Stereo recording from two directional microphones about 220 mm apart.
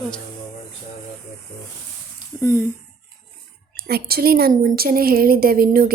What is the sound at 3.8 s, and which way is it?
A woman's voice, 45° right (ahead or behind).